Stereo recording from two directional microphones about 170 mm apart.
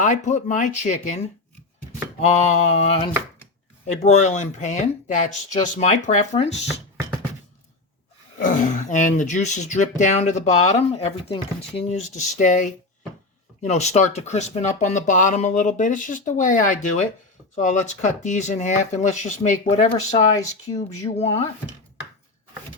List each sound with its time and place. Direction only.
0.0 s speech: 45° left (ahead or behind)
2.2 s mantra: 40° left (ahead or behind)
3.8 s speech: 45° left (ahead or behind)
5.8 s mantra: 45° left (ahead or behind)
8.4 s speech: 50° left (ahead or behind)
20.7 s mantra: 40° left (ahead or behind)